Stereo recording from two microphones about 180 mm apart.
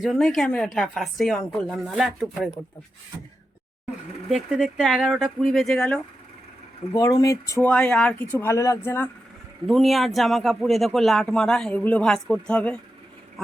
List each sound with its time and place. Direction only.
0.0 s speech: centre (ahead or behind)
4.3 s speech: 5° right (ahead or behind)
6.9 s speech: 20° left (ahead or behind)
7.7 s speech: 5° left (ahead or behind)
9.6 s speech: centre (ahead or behind)